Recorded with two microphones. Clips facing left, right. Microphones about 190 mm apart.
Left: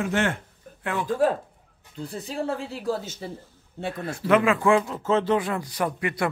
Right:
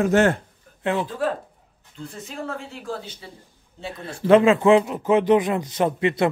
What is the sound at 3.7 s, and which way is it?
Speech, 55° left (ahead or behind).